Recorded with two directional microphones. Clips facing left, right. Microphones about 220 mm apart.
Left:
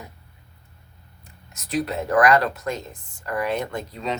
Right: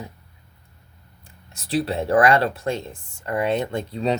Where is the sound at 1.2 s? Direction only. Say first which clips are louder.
Right 1 dB; 30° right (ahead or behind).